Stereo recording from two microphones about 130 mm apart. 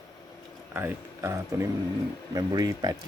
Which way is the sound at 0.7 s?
20° right (ahead or behind).